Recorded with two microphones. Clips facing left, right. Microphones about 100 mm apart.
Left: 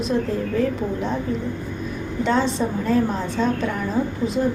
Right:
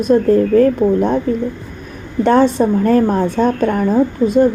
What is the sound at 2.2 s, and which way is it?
A woman's voice, 55° right (ahead or behind).